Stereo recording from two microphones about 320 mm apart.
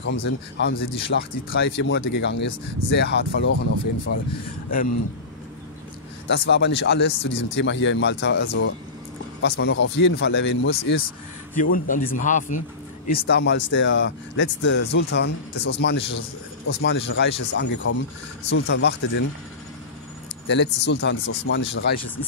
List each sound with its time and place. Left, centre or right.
0.0 s speech: left
6.2 s speech: left
20.4 s speech: left